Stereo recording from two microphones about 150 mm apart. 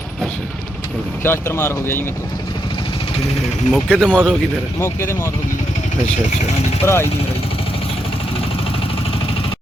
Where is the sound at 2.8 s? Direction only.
35° left (ahead or behind).